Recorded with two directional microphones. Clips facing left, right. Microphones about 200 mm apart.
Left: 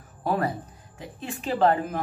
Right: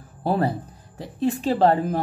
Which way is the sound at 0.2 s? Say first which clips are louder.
Right 3 dB; 30° right (ahead or behind).